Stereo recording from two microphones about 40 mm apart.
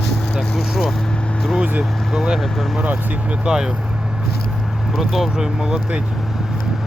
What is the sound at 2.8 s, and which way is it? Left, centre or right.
Speech, right.